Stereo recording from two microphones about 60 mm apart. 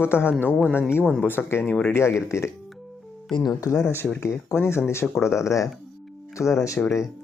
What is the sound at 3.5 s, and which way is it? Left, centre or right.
Speech, left.